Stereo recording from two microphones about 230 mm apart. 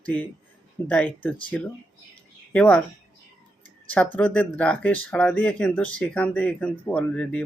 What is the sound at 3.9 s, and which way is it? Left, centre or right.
Speech, centre.